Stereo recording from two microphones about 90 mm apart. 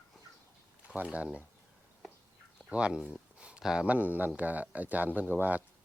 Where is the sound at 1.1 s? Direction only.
15° right (ahead or behind).